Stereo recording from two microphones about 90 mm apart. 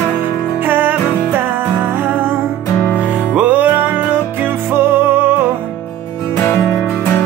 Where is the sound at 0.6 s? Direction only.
20° right (ahead or behind).